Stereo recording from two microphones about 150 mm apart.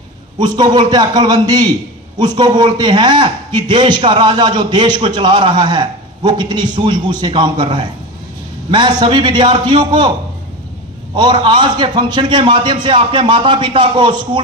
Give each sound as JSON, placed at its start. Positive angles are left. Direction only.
{"t": 0.3, "sound": "a man's voice", "side_deg": -30}
{"t": 11.1, "sound": "a man's voice", "side_deg": -30}